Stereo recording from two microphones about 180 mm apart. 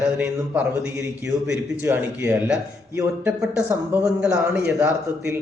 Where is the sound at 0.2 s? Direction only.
5° right (ahead or behind).